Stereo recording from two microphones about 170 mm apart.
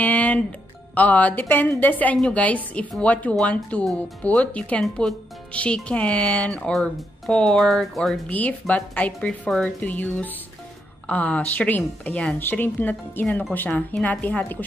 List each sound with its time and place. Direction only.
0.0 s music: 10° left (ahead or behind)
0.9 s a woman's voice: 10° left (ahead or behind)